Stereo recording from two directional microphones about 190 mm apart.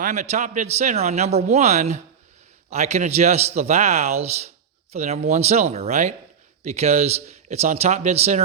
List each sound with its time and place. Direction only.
0.0 s a man's voice: 40° right (ahead or behind)